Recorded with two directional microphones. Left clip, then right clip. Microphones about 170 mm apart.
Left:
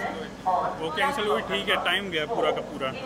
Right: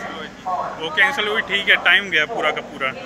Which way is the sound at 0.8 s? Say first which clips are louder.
Right 7 dB; 15° left (ahead or behind).